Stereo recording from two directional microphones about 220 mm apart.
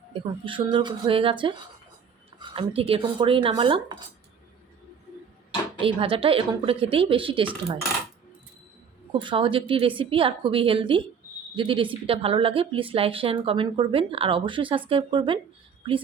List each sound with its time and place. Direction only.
0.1 s speech: 20° right (ahead or behind)
5.8 s speech: 25° right (ahead or behind)
9.2 s speech: 25° right (ahead or behind)